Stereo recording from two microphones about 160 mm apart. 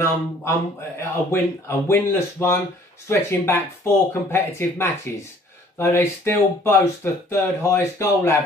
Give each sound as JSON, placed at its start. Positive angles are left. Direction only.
{"t": 0.0, "sound": "speech", "side_deg": 15}